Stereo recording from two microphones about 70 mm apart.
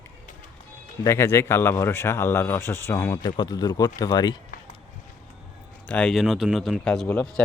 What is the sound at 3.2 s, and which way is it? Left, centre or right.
Speech, left.